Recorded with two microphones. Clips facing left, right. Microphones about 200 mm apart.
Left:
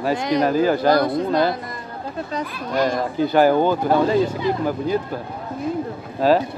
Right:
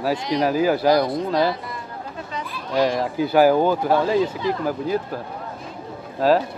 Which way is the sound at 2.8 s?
5° right (ahead or behind).